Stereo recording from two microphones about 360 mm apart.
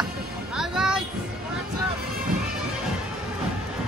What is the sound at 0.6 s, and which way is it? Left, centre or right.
Music, centre.